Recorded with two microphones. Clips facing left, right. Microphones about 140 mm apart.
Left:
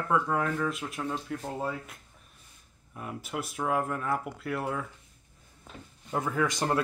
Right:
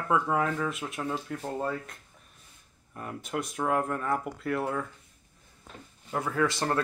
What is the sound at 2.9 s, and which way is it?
Speech, 5° left (ahead or behind).